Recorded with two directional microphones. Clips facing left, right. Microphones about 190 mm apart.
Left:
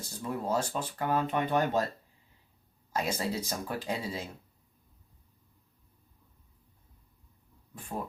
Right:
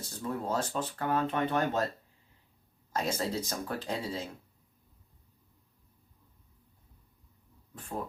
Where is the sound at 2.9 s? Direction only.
10° left (ahead or behind).